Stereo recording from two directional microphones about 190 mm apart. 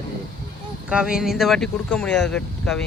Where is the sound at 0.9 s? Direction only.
5° right (ahead or behind).